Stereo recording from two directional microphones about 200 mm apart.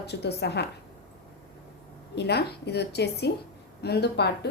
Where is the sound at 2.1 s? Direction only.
55° left (ahead or behind).